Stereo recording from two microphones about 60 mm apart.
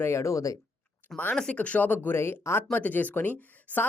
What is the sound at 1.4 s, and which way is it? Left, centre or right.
Speech, centre.